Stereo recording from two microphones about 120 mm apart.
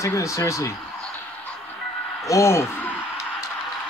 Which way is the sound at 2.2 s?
25° left (ahead or behind).